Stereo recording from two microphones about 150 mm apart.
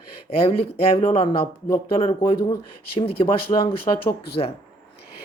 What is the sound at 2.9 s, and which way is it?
Speech, 40° left (ahead or behind).